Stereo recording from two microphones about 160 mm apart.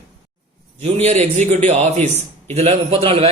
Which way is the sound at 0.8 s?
40° right (ahead or behind).